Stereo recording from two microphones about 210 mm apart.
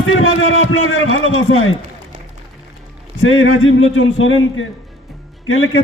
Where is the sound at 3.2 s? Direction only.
75° left (ahead or behind).